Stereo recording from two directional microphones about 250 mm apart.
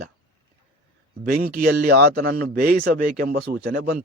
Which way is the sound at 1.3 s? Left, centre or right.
Right.